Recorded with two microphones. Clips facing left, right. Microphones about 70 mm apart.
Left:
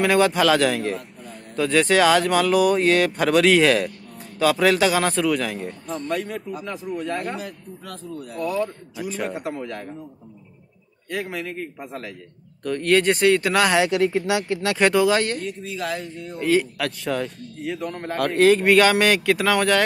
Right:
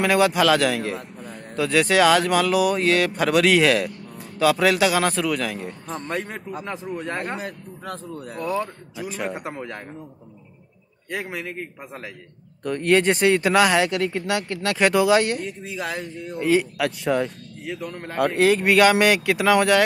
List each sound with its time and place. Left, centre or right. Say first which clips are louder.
0.0 s speech: even; centre
5.9 s a man's voice: left 2 dB; right
9.3 s a man's voice: left 2 dB; right
11.1 s speech: left 1 dB; centre
12.6 s speech: even; centre
17.6 s speech: left 3 dB; centre